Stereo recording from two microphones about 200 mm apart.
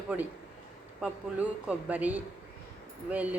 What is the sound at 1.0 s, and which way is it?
A woman's voice, 5° right (ahead or behind).